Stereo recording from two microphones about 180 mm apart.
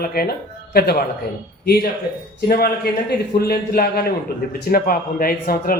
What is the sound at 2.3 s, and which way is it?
A man's voice, 55° left (ahead or behind).